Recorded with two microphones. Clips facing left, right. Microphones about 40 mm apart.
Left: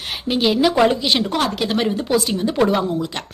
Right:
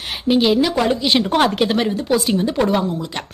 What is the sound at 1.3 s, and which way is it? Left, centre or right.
Speech, right.